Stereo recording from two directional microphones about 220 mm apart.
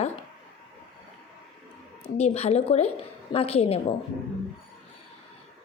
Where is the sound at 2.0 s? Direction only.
30° left (ahead or behind).